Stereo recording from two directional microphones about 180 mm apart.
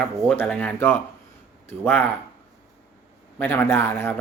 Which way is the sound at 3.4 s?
10° left (ahead or behind).